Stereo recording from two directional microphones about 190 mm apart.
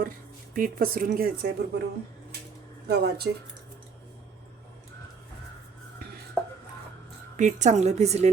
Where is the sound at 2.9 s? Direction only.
60° right (ahead or behind).